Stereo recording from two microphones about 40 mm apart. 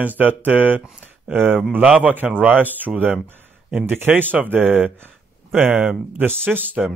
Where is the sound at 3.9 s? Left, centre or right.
Right.